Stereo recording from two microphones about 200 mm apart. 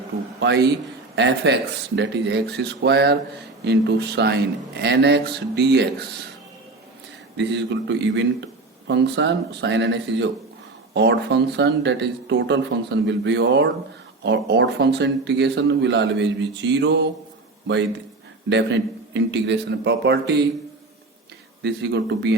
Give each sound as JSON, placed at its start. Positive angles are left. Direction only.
{"t": 0.3, "sound": "a man's voice", "side_deg": -55}
{"t": 7.3, "sound": "speech", "side_deg": -60}
{"t": 18.4, "sound": "speech", "side_deg": -65}
{"t": 21.6, "sound": "speech", "side_deg": -60}